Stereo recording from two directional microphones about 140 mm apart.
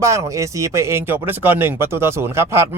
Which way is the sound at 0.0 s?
20° right (ahead or behind).